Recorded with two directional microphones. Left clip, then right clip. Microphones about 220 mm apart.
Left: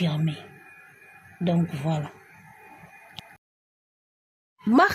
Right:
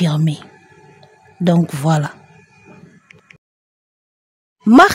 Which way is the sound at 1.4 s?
45° right (ahead or behind).